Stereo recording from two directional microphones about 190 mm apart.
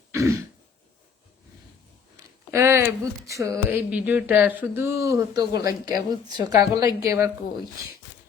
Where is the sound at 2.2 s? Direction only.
15° right (ahead or behind).